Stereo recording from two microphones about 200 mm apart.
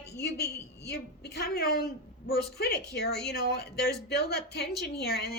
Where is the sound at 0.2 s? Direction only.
55° left (ahead or behind).